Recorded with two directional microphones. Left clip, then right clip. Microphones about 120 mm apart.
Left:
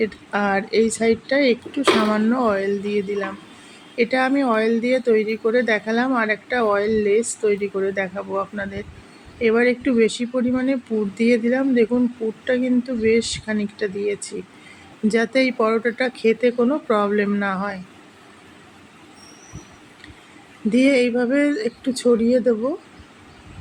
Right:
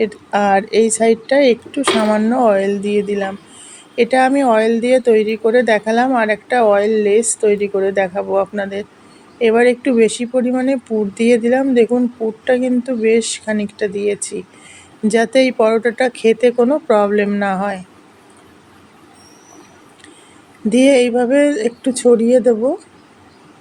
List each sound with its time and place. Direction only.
0.0 s a woman's voice: 45° right (ahead or behind)
20.7 s a woman's voice: 45° right (ahead or behind)